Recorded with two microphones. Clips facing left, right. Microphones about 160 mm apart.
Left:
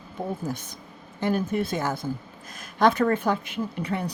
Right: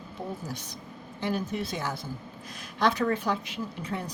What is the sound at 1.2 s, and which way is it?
Speech, 50° left (ahead or behind).